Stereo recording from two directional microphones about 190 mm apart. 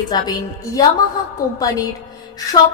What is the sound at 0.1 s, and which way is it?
Speech, 20° left (ahead or behind).